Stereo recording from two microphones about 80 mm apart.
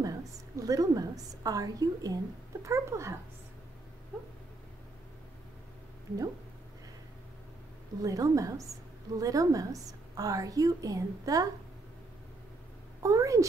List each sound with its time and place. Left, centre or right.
0.0 s a woman's voice: right
2.6 s speech: right
8.0 s a woman's voice: right
13.0 s speech: right